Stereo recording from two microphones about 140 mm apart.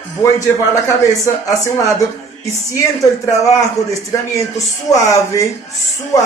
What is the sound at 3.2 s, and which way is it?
Speech, 25° left (ahead or behind).